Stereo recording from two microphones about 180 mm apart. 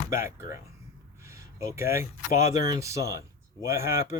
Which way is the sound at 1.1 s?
15° right (ahead or behind).